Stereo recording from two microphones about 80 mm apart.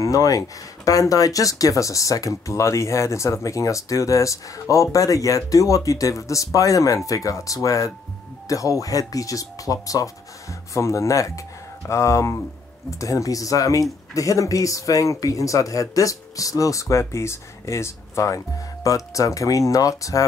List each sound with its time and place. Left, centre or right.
0.0 s speech: left